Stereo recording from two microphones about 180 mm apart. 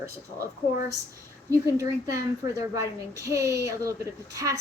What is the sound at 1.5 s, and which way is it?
A woman's voice, 15° right (ahead or behind).